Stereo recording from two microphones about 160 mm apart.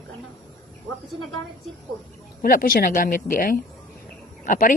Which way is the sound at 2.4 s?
60° left (ahead or behind).